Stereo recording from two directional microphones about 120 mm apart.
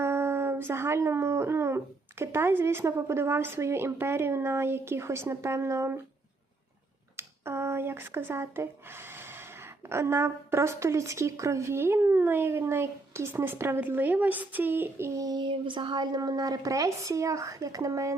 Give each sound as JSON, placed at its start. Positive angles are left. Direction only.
{"t": 0.0, "sound": "speech", "side_deg": -20}
{"t": 7.2, "sound": "speech", "side_deg": -20}